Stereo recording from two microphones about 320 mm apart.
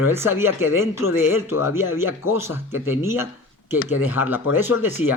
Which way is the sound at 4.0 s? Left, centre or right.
Centre.